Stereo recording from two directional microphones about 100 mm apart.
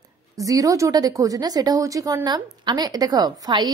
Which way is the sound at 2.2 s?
45° right (ahead or behind).